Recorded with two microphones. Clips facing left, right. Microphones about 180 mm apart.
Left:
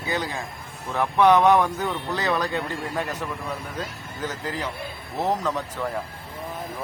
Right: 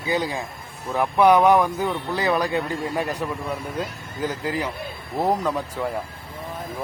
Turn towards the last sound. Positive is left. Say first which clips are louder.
# right 2 dB
turn(degrees=-10)  # may be behind; listen again after turning